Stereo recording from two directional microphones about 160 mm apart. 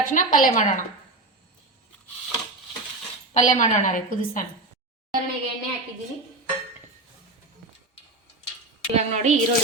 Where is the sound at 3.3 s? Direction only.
50° left (ahead or behind).